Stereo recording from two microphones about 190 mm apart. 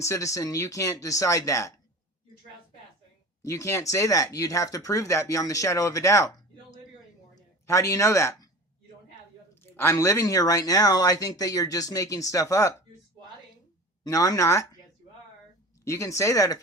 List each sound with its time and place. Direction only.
0.0 s speech: 15° left (ahead or behind)
3.4 s speech: 15° left (ahead or behind)
9.7 s speech: 15° left (ahead or behind)
14.0 s speech: 20° left (ahead or behind)
15.8 s speech: 15° left (ahead or behind)